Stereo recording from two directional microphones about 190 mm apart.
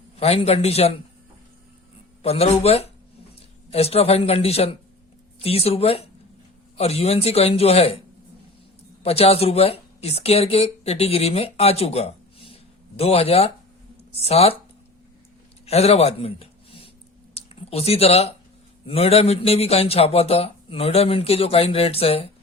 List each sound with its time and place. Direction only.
0.2 s a man's voice: 35° left (ahead or behind)
2.2 s a man's voice: 30° left (ahead or behind)
9.0 s a man's voice: 30° left (ahead or behind)
15.6 s a sound: 35° left (ahead or behind)
17.3 s a man's voice: 30° left (ahead or behind)